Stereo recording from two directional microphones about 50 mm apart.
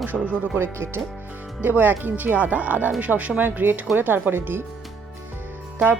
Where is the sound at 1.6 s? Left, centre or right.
Right.